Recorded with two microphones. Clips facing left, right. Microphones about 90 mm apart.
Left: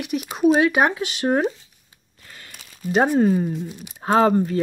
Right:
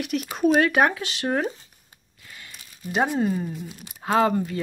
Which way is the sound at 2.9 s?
45° left (ahead or behind).